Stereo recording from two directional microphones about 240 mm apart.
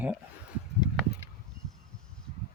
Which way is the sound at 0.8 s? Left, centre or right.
Centre.